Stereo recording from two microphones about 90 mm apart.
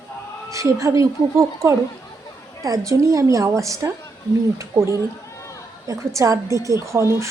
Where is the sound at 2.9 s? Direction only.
35° right (ahead or behind).